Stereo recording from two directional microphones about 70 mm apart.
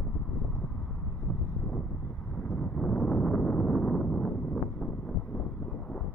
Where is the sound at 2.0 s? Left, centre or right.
Left.